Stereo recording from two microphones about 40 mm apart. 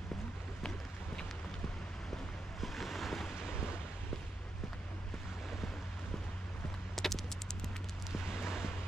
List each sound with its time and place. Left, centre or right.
0.6 s boat: centre
2.6 s waves: centre
7.0 s a sound: centre
8.1 s vehicle: centre